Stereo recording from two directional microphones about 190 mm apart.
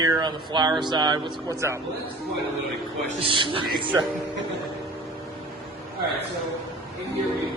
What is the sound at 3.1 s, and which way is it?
Speech, 30° right (ahead or behind).